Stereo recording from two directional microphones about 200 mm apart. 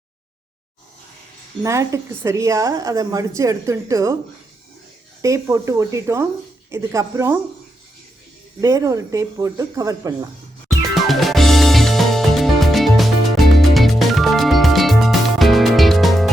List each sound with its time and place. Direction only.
1.6 s a woman's voice: 15° right (ahead or behind)
5.2 s a woman's voice: 15° right (ahead or behind)
8.6 s a woman's voice: 15° right (ahead or behind)
11.1 s music: centre (ahead or behind)